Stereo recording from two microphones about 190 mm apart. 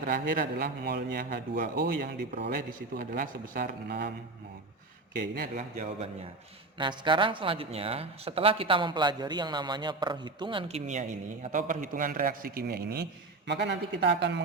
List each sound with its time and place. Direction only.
0.0 s a man's voice: 50° right (ahead or behind)
5.2 s a man's voice: 50° right (ahead or behind)
5.5 s a man's voice: 35° right (ahead or behind)
6.7 s a man's voice: 25° right (ahead or behind); by 13.1 s 55° right (ahead or behind)
13.5 s speech: 65° right (ahead or behind)